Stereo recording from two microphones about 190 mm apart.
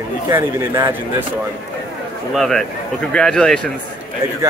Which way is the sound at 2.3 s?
Centre (ahead or behind).